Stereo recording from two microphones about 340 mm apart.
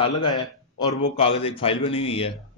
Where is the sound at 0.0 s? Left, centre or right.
Centre.